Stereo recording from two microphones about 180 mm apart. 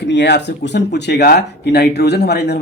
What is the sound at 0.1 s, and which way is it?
Speech, 70° left (ahead or behind).